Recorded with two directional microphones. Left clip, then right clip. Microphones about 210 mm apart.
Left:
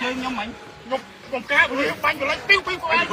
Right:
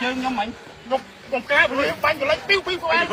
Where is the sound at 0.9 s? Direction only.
50° right (ahead or behind).